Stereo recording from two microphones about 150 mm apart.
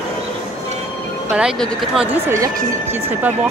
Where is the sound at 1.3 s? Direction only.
5° right (ahead or behind).